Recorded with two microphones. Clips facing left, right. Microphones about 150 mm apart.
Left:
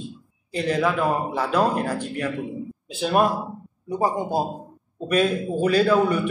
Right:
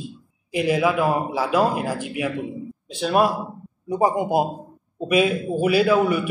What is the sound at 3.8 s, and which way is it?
A man's voice, 15° right (ahead or behind).